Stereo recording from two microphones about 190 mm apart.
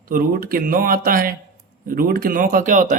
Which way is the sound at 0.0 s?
50° right (ahead or behind).